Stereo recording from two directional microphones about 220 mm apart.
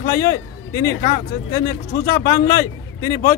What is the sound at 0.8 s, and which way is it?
Speech, 40° left (ahead or behind).